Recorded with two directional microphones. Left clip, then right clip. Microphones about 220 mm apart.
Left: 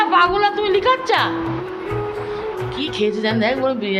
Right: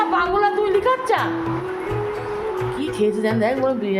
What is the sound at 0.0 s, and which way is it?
Music, centre (ahead or behind).